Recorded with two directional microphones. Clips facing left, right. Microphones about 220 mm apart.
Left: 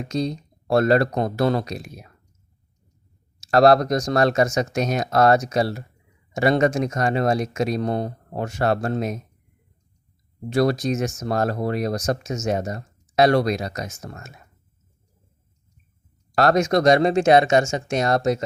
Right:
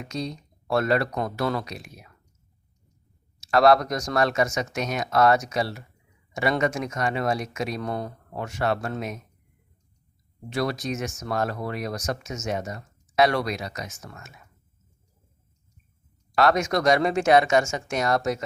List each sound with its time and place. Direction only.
0.0 s speech: 35° left (ahead or behind)
3.4 s speech: 40° left (ahead or behind)
10.5 s speech: 40° left (ahead or behind)
16.3 s speech: 40° left (ahead or behind)